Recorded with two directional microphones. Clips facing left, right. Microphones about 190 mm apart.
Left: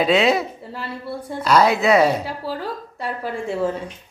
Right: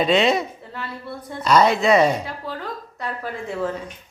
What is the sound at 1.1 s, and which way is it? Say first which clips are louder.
Speech: left 4 dB; 30° left (ahead or behind).